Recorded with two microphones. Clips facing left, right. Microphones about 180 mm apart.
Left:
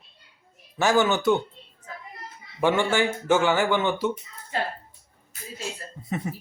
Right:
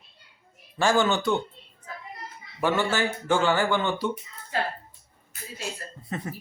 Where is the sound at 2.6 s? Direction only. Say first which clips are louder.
Left 3 dB; 10° left (ahead or behind).